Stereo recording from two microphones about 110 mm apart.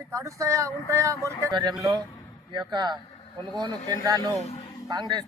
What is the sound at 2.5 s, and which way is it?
Speech, 40° right (ahead or behind).